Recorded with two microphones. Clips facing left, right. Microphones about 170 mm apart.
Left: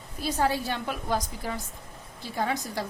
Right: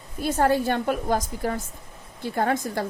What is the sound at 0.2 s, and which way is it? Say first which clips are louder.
Speech: right 5 dB; 50° right (ahead or behind).